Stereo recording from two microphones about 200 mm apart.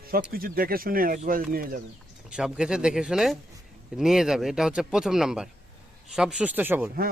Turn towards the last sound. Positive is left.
turn(degrees=-10)  # may be behind; listen again after turning